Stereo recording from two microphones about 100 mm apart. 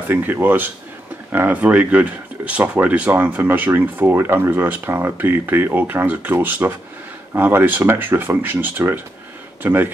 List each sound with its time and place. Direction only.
0.1 s speech: 20° right (ahead or behind)